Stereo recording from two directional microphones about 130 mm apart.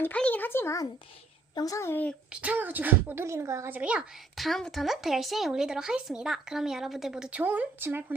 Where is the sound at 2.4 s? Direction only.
15° right (ahead or behind).